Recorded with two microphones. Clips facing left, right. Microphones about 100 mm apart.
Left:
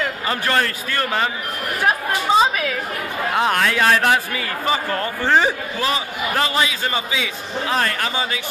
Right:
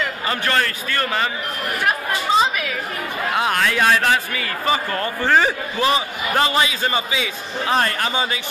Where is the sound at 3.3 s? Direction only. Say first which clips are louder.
Left 1 dB; 5° right (ahead or behind).